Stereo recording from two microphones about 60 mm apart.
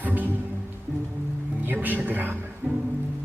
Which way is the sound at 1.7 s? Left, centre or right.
Right.